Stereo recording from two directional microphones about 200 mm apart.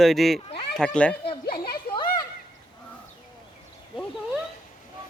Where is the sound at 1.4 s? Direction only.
50° left (ahead or behind).